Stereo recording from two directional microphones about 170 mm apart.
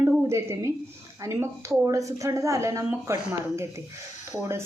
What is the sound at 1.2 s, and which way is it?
A woman's voice, 15° right (ahead or behind).